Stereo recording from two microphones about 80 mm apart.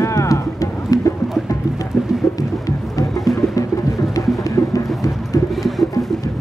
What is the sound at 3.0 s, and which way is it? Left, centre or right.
Music, left.